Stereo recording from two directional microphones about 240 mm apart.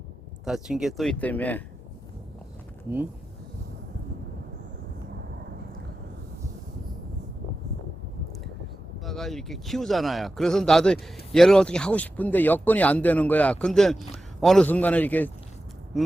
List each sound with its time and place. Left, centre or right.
0.4 s speech: centre
9.0 s a man's voice: centre